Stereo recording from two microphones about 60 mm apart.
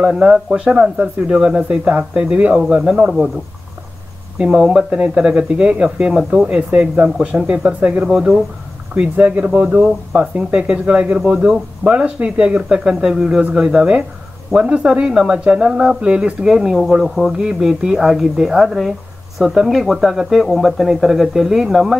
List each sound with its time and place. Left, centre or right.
0.0 s speech: centre
4.4 s speech: centre
9.1 s speech: right; by 21.9 s centre